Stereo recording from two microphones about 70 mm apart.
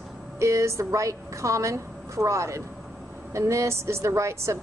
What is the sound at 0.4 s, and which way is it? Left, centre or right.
A woman's voice, right.